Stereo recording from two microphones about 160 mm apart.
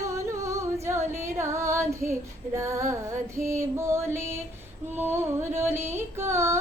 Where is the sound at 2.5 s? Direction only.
15° right (ahead or behind).